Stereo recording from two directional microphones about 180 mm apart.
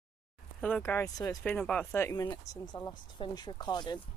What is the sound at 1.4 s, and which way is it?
Speech, 10° left (ahead or behind).